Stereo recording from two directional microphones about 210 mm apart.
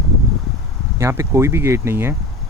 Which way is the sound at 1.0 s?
15° right (ahead or behind).